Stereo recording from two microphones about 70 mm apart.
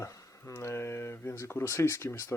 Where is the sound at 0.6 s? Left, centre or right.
Left.